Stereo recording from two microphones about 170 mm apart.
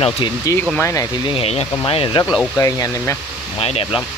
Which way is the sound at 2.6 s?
20° left (ahead or behind).